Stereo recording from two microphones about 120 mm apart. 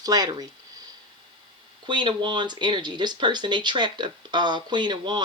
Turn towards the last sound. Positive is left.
turn(degrees=-40)  # may be behind; listen again after turning